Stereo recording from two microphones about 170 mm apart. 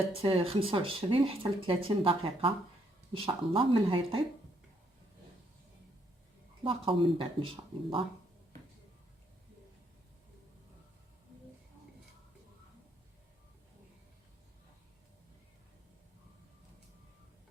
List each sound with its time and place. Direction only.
0.1 s speech: 35° right (ahead or behind)
6.7 s speech: 30° right (ahead or behind)